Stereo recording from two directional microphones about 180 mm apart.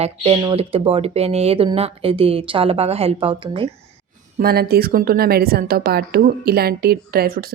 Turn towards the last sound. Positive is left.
turn(degrees=-55)  # may be behind; listen again after turning